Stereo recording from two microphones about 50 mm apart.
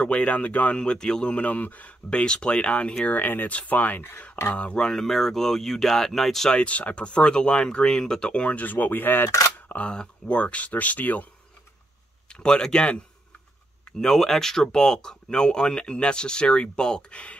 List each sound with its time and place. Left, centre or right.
0.0 s speech: left
3.2 s speech: left
4.6 s speech: left
4.8 s speech: centre
6.5 s speech: left
9.8 s speech: left
12.3 s speech: centre
13.9 s speech: centre; by 17.4 s left